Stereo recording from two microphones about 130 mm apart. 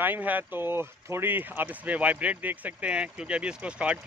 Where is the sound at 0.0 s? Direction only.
15° right (ahead or behind).